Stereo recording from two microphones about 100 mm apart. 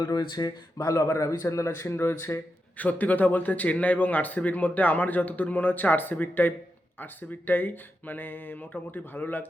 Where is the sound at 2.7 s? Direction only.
15° left (ahead or behind).